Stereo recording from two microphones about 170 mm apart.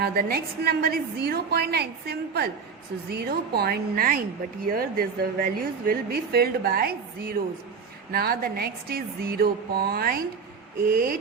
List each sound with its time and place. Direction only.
0.0 s a woman's voice: 65° right (ahead or behind)